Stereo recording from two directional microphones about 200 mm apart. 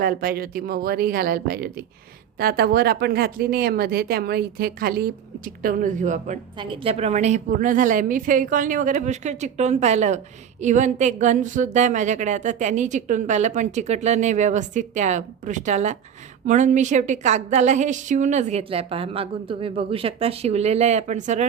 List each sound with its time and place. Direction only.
0.0 s a woman's voice: 45° right (ahead or behind)
6.6 s a woman's voice: 25° right (ahead or behind)